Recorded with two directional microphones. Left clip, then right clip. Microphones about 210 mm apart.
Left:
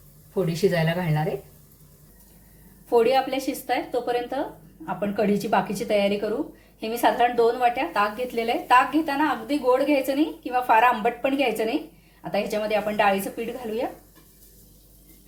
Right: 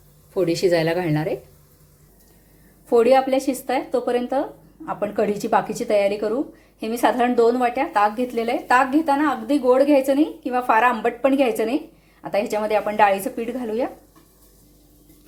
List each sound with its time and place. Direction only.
0.4 s speech: 40° right (ahead or behind)
2.9 s speech: 25° right (ahead or behind)